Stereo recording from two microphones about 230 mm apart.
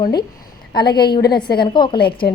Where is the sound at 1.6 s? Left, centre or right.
Centre.